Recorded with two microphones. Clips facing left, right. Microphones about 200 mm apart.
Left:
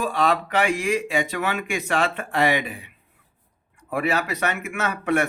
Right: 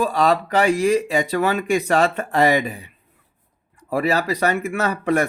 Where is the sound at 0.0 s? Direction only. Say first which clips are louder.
Right 4 dB; 40° right (ahead or behind).